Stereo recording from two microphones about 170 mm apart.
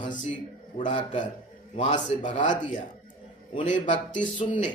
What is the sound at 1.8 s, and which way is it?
Speech, 45° left (ahead or behind).